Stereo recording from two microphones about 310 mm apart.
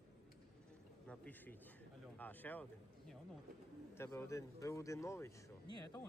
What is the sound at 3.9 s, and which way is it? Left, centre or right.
Speech, centre.